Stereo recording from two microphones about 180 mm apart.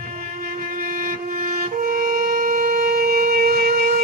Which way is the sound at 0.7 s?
50° right (ahead or behind).